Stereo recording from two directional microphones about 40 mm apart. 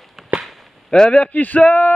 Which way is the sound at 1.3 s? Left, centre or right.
Left.